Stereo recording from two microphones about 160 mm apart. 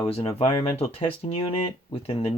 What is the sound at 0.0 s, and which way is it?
Speech, 35° left (ahead or behind).